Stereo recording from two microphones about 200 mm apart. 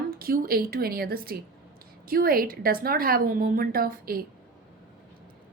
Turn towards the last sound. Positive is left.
turn(degrees=-45)  # may be behind; listen again after turning